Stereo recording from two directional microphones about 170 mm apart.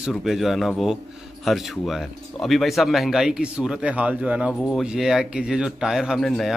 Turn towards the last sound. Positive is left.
turn(degrees=0)  # may be behind; listen again after turning